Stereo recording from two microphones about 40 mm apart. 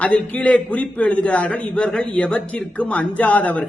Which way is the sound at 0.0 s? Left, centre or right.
Left.